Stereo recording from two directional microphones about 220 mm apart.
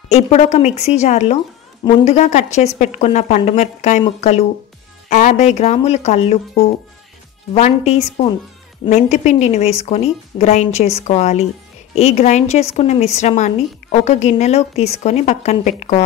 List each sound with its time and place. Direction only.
0.1 s a woman's voice: 30° left (ahead or behind)